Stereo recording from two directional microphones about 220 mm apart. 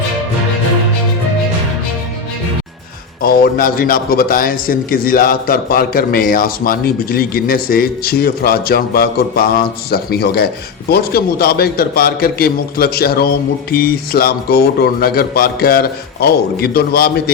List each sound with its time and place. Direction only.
3.2 s a man's voice: 45° left (ahead or behind)